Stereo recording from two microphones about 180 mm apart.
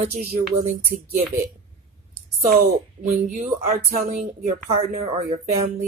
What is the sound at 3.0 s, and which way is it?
Speech, 40° right (ahead or behind).